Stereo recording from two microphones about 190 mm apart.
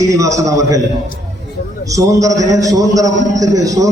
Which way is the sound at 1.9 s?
15° right (ahead or behind).